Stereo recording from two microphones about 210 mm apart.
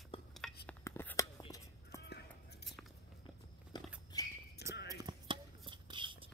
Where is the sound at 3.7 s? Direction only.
20° left (ahead or behind).